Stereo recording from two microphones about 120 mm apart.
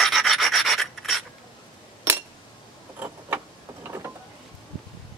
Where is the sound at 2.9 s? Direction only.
20° right (ahead or behind).